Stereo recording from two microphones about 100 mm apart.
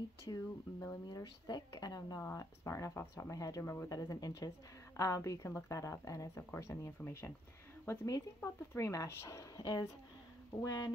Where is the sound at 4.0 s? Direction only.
40° left (ahead or behind).